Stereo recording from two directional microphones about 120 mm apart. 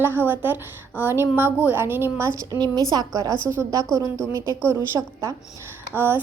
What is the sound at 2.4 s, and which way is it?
A woman's voice, 35° right (ahead or behind).